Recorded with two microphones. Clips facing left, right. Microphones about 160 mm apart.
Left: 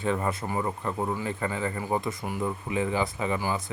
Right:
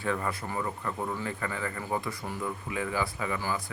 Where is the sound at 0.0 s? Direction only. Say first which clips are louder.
Left 4 dB; 20° left (ahead or behind).